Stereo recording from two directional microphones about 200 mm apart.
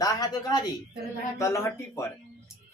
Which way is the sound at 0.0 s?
20° left (ahead or behind).